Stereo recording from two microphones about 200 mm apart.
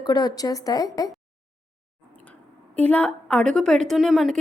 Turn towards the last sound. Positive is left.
turn(degrees=0)  # may be behind; listen again after turning